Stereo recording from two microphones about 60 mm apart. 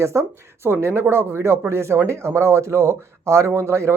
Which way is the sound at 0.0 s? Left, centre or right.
Right.